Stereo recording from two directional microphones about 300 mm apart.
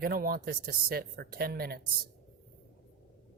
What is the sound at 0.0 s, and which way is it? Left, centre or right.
Speech, right.